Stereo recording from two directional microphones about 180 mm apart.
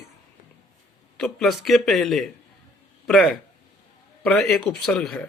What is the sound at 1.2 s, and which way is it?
Speech, centre (ahead or behind).